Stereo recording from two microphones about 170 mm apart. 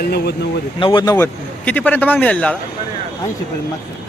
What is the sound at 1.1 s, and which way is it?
Speech, 10° left (ahead or behind).